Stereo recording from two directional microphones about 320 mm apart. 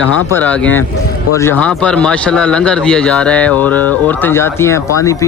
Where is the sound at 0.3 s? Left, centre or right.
Centre.